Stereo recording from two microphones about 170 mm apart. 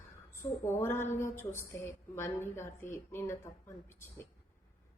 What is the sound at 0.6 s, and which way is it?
A woman's voice, 15° left (ahead or behind).